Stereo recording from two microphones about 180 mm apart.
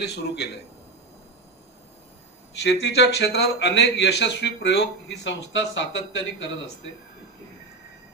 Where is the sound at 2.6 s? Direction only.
70° left (ahead or behind); by 6.9 s 90° left.